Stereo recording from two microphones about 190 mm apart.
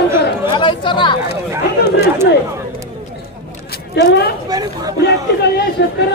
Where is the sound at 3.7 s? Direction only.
60° left (ahead or behind).